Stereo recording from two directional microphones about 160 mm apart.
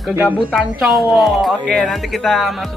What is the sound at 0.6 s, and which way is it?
Speech, centre (ahead or behind).